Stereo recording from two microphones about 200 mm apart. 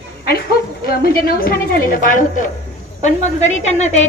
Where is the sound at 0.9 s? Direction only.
50° left (ahead or behind).